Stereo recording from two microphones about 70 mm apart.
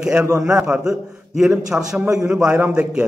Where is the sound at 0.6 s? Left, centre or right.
Centre.